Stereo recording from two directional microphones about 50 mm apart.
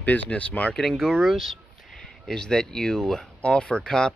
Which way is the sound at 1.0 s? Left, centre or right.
Centre.